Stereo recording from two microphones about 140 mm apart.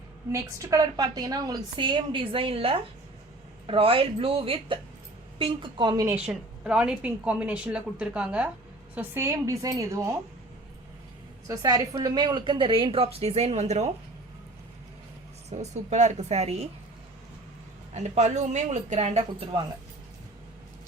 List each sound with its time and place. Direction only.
0.3 s a woman's voice: 20° right (ahead or behind)
6.1 s a woman's voice: 5° right (ahead or behind)
9.0 s a woman's voice: 20° right (ahead or behind)
11.4 s a woman's voice: 25° right (ahead or behind); by 13.9 s 55° right (ahead or behind)
15.4 s a woman's voice: 55° right (ahead or behind)
17.9 s speech: 55° right (ahead or behind)